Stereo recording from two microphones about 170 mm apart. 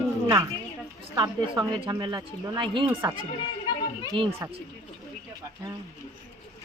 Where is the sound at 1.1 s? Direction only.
25° right (ahead or behind).